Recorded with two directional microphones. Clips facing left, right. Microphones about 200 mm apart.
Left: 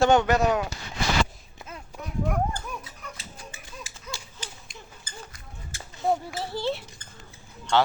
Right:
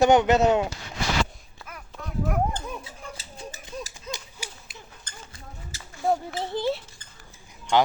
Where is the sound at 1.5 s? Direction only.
25° left (ahead or behind).